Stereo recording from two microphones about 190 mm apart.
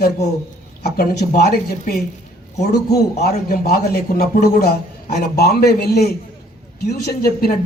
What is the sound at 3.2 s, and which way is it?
A man's voice, 55° left (ahead or behind).